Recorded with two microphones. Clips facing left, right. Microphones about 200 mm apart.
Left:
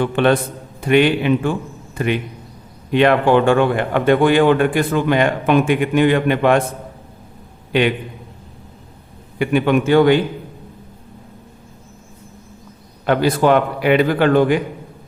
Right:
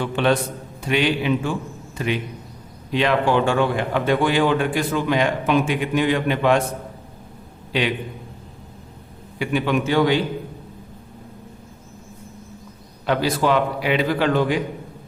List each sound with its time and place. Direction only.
0.0 s a man's voice: 55° left (ahead or behind)
7.7 s a man's voice: 55° left (ahead or behind)
9.4 s a man's voice: 55° left (ahead or behind)
13.1 s a man's voice: 55° left (ahead or behind)